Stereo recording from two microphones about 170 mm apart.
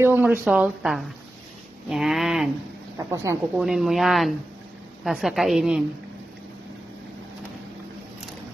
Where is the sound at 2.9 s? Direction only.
20° right (ahead or behind).